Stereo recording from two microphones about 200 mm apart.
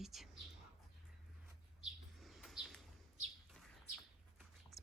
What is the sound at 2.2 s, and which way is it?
Bird, centre (ahead or behind).